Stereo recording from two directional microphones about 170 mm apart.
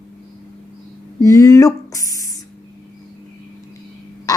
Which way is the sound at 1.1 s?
20° left (ahead or behind).